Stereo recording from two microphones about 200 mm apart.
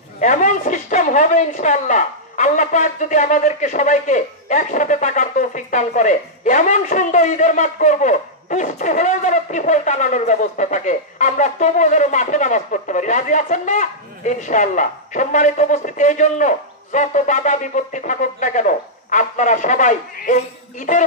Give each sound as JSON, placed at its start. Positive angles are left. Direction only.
{"t": 0.2, "sound": "speech", "side_deg": 40}